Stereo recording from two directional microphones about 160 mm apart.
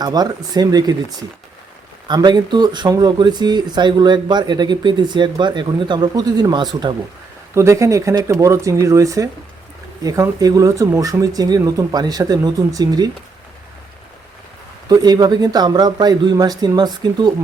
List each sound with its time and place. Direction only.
0.0 s speech: 25° right (ahead or behind)
2.0 s speech: 25° right (ahead or behind)
14.8 s speech: 25° right (ahead or behind)